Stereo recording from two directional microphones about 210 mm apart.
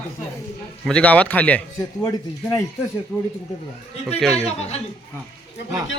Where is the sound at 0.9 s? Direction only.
5° left (ahead or behind).